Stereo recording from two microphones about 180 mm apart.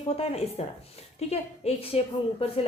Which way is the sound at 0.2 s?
35° left (ahead or behind).